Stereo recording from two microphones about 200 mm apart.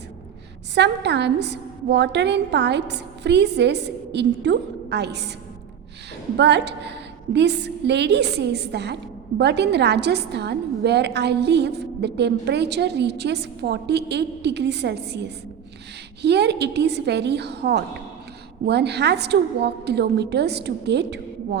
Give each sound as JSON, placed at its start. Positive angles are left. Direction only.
{"t": 0.7, "sound": "a woman's voice", "side_deg": -60}
{"t": 6.3, "sound": "a woman's voice", "side_deg": -60}